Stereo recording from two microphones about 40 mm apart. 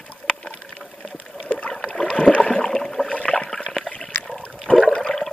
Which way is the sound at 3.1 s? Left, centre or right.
Left.